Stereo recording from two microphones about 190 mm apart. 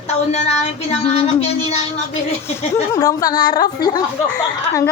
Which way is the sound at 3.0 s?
20° left (ahead or behind).